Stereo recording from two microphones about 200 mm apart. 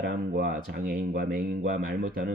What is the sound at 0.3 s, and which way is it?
Speech, 45° right (ahead or behind).